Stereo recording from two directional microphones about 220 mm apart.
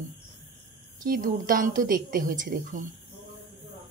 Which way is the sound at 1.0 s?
40° right (ahead or behind).